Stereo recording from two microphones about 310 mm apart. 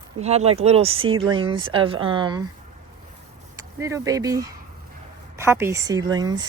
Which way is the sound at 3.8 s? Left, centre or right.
Centre.